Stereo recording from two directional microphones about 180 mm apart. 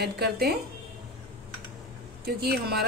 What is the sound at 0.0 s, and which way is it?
Speech, 65° right (ahead or behind).